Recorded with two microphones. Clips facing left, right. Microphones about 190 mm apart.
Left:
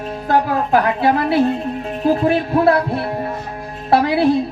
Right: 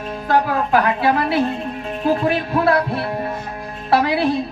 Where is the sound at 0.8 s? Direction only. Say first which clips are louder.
Left 1 dB; 35° left (ahead or behind).